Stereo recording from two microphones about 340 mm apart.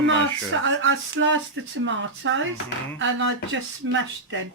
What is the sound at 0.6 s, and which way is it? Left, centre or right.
Speech, right.